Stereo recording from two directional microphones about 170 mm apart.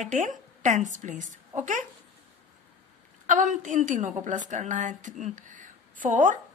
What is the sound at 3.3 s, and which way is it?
Speech, 50° right (ahead or behind).